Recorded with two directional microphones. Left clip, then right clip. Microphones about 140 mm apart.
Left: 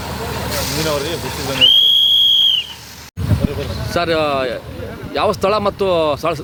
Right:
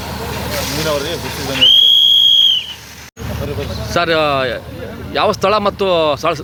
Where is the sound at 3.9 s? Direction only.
10° left (ahead or behind).